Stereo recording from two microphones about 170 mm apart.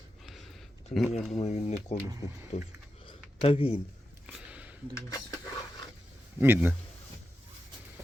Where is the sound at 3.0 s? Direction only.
35° left (ahead or behind).